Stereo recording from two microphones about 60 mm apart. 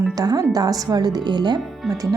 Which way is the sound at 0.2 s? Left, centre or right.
Right.